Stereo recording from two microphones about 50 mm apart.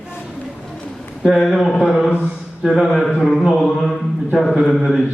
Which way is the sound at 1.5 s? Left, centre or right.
Centre.